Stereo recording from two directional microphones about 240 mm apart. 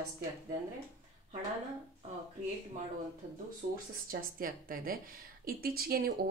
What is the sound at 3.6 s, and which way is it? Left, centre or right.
Speech, right.